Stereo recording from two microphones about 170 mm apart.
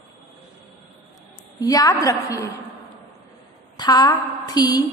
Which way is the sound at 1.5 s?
20° left (ahead or behind).